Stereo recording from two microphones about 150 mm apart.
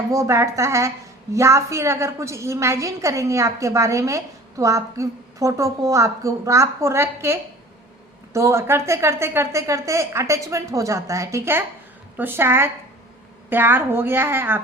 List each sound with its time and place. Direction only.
0.1 s a woman's voice: 20° right (ahead or behind)